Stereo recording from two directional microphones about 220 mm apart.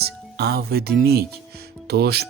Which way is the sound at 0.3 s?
45° right (ahead or behind).